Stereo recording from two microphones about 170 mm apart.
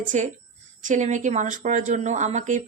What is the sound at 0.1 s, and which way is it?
A woman's voice, 45° right (ahead or behind).